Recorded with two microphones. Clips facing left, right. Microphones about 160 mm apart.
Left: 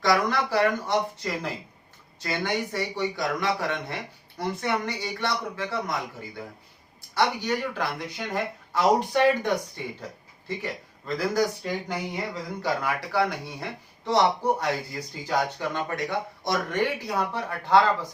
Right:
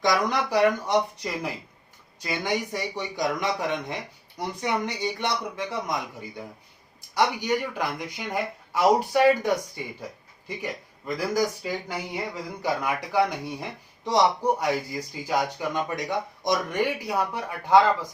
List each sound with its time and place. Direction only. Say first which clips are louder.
0.0 s speech: even; 15° right (ahead or behind)
7.1 s speech: right 1 dB; 15° right (ahead or behind)